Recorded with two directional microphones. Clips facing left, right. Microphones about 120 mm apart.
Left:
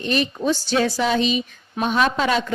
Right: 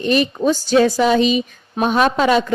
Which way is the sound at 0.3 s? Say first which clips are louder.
Right 6 dB; 40° right (ahead or behind).